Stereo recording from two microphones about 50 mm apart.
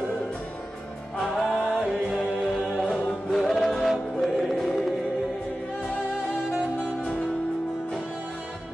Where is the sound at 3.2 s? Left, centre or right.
Centre.